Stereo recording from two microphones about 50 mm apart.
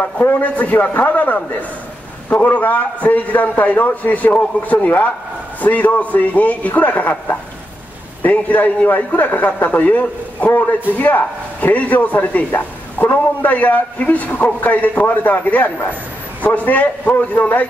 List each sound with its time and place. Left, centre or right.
0.3 s a man's voice: left
2.4 s a man's voice: left